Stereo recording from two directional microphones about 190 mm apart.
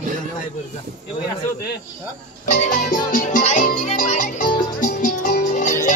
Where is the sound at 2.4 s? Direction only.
40° left (ahead or behind).